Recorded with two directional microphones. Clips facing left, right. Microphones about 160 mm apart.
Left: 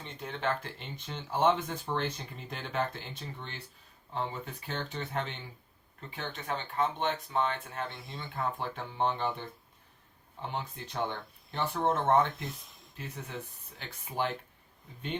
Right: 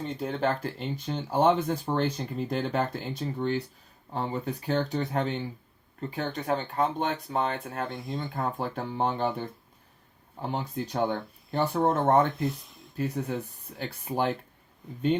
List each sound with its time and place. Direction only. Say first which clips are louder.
0.0 s speech: right 7 dB; 40° right (ahead or behind)
12.3 s speech: right 11 dB; centre (ahead or behind)
13.0 s speech: right 11 dB; 40° right (ahead or behind)